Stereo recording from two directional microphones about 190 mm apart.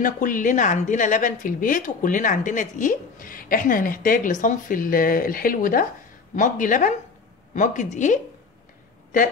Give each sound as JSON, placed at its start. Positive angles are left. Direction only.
{"t": 0.0, "sound": "a woman's voice", "side_deg": 45}